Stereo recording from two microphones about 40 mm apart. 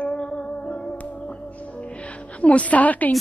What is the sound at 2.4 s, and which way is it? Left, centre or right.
Speech, left.